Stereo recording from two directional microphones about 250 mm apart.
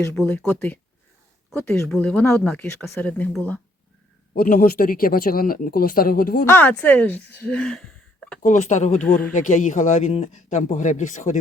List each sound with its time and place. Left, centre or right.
0.1 s speech: centre
4.4 s speech: left
6.4 s speech: centre
8.4 s speech: left